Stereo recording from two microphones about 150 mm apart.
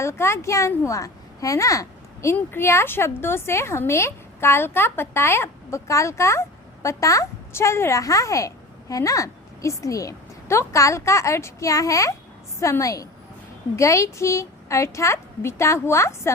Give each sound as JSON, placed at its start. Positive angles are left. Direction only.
{"t": 0.0, "sound": "a child's voice", "side_deg": 20}